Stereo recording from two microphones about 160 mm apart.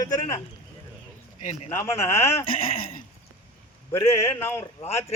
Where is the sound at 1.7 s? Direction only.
15° left (ahead or behind).